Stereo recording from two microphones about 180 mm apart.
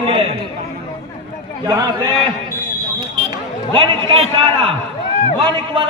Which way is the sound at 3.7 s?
30° right (ahead or behind).